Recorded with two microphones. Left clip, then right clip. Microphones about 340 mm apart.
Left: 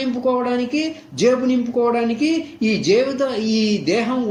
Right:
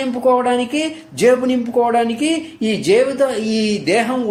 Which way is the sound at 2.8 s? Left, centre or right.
Right.